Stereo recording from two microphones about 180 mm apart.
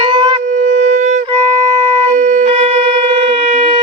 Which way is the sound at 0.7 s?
40° right (ahead or behind).